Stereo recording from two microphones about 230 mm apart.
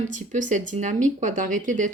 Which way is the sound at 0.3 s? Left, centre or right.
Right.